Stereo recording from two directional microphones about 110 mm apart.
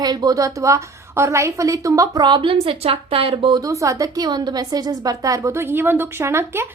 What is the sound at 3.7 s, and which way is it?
A woman's voice, 30° right (ahead or behind).